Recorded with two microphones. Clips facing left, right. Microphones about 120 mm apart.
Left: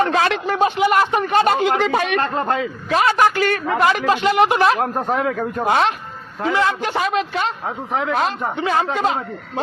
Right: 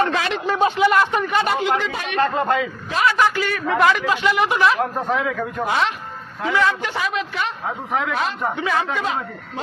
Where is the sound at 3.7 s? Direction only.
45° left (ahead or behind).